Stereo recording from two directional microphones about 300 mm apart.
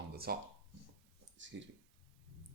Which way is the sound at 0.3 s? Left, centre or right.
Right.